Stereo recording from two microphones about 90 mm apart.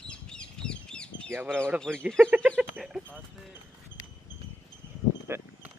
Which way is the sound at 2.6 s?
5° right (ahead or behind).